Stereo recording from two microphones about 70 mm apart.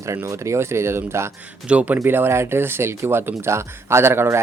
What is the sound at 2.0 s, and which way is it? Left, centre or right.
Speech, right.